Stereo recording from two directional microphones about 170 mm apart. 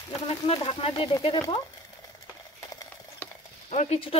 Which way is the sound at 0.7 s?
35° left (ahead or behind).